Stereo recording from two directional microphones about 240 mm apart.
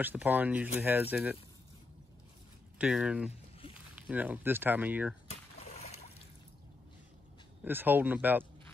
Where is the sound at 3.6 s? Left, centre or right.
Left.